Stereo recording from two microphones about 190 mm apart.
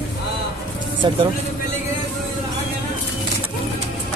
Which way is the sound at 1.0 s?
25° right (ahead or behind).